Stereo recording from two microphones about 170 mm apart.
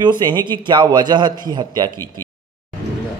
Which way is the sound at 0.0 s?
25° right (ahead or behind).